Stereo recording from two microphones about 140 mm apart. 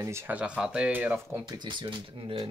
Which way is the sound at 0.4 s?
5° right (ahead or behind).